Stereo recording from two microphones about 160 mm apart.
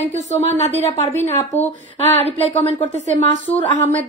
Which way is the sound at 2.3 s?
35° left (ahead or behind).